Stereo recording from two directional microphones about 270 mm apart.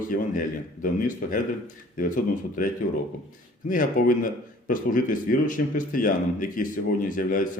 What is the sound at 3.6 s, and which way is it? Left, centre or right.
A man's voice, left.